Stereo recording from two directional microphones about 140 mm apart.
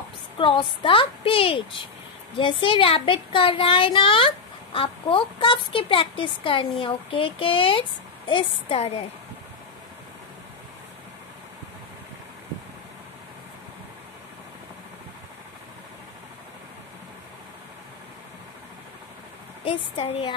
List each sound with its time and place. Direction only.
0.4 s a woman's voice: 35° left (ahead or behind)
19.6 s a woman's voice: 45° left (ahead or behind)